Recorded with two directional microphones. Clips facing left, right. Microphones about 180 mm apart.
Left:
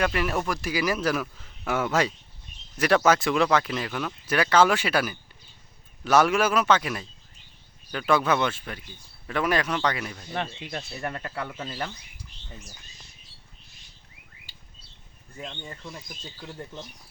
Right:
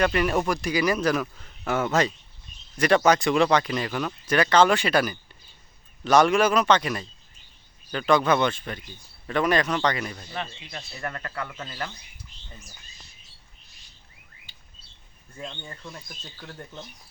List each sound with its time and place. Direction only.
0.0 s speech: centre (ahead or behind)
10.3 s speech: 50° left (ahead or behind)
11.0 s speech: 15° left (ahead or behind)
15.4 s speech: 5° left (ahead or behind)